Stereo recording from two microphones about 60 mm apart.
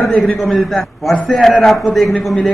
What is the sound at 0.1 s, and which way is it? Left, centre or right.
Speech, centre.